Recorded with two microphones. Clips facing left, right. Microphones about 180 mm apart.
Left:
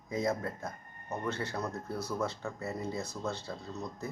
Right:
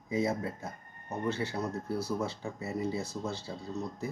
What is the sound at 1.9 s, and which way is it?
Speech, 30° right (ahead or behind).